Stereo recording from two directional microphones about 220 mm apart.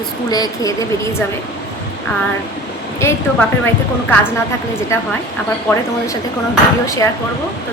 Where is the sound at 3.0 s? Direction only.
10° left (ahead or behind).